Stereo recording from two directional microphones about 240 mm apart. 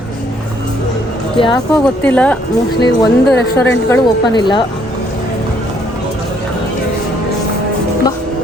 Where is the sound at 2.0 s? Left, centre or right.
Centre.